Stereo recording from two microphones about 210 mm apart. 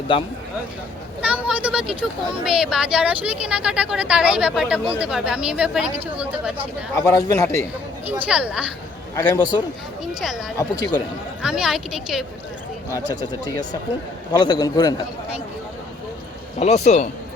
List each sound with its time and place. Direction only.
0.1 s a man's voice: 25° left (ahead or behind)
1.2 s speech: 5° right (ahead or behind)
6.9 s a man's voice: 15° left (ahead or behind)
8.0 s speech: 5° right (ahead or behind)
9.1 s a man's voice: 15° left (ahead or behind)
10.0 s speech: centre (ahead or behind)
11.4 s speech: 5° right (ahead or behind)
14.3 s a man's voice: 20° left (ahead or behind)
16.6 s speech: 30° left (ahead or behind)